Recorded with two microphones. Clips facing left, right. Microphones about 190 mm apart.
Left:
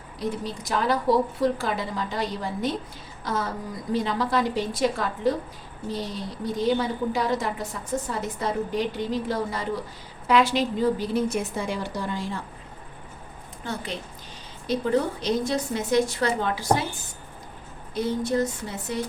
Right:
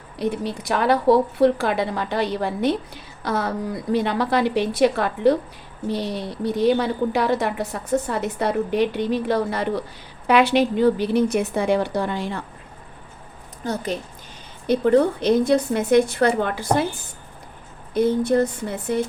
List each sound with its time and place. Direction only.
0.2 s a woman's voice: 65° right (ahead or behind)
13.7 s a woman's voice: 45° right (ahead or behind)
14.7 s a woman's voice: 60° right (ahead or behind)
17.9 s a woman's voice: 55° right (ahead or behind)